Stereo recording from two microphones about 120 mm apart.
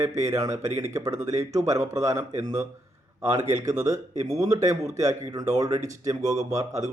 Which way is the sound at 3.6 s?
25° right (ahead or behind).